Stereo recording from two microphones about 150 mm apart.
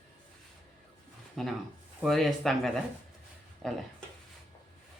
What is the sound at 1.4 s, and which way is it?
Speech, centre (ahead or behind).